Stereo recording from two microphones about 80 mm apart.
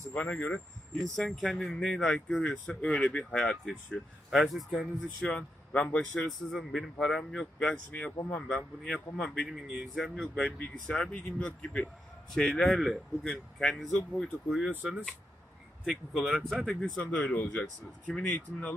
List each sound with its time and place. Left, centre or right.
0.1 s speech: centre
1.1 s speech: centre
5.3 s speech: centre
15.9 s speech: centre